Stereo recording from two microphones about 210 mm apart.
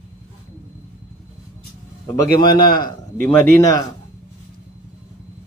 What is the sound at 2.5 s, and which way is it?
Speech, 45° left (ahead or behind).